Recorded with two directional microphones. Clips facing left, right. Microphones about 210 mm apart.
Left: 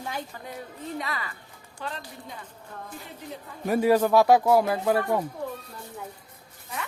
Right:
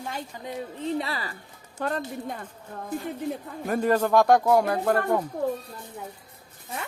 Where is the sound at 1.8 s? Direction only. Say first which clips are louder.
Right 8 dB; 50° right (ahead or behind).